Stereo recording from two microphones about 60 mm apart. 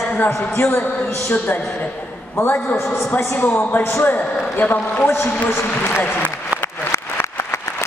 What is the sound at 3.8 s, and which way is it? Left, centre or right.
Speech, left.